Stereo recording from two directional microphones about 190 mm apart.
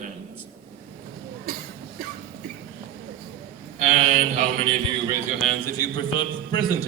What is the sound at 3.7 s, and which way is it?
Speech, 35° right (ahead or behind).